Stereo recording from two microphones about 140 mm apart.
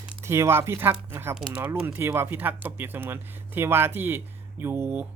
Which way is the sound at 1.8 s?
15° right (ahead or behind).